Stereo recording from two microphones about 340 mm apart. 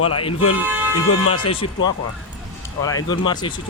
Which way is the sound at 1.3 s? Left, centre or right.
Centre.